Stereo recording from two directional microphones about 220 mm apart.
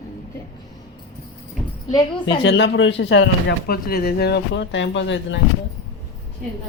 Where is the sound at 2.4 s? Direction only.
60° left (ahead or behind).